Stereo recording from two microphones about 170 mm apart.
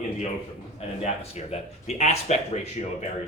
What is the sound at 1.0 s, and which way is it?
Speech, 40° left (ahead or behind).